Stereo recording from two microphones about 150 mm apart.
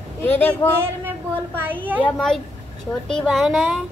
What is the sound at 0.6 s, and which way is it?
Speech, 15° left (ahead or behind).